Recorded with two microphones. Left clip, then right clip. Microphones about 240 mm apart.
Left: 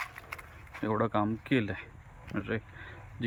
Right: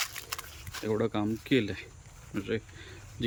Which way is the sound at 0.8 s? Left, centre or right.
Centre.